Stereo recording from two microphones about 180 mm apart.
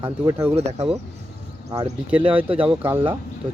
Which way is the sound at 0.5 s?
35° right (ahead or behind).